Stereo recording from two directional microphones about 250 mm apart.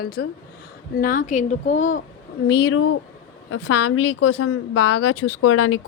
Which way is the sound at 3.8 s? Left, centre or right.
Left.